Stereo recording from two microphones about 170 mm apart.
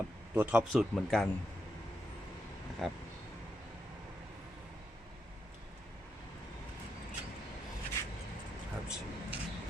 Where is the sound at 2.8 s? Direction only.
Centre (ahead or behind).